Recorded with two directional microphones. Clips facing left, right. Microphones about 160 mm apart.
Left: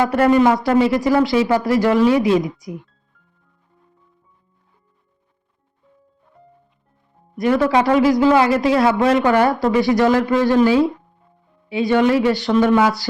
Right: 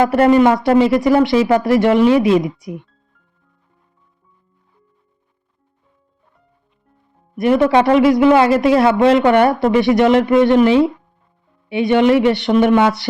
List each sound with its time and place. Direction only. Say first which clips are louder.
0.4 s speech: right 3 dB; 25° right (ahead or behind)
7.3 s speech: right 3 dB; 20° right (ahead or behind)